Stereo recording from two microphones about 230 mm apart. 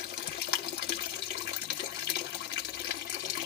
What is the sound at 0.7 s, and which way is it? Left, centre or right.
Water, left.